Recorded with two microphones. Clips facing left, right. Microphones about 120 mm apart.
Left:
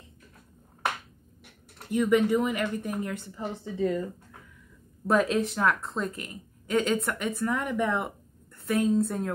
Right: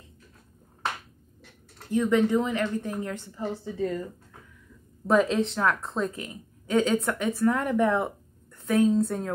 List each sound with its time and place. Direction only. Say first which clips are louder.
1.9 s a woman's voice: even; 15° left (ahead or behind)
5.0 s a woman's voice: right 2 dB; centre (ahead or behind)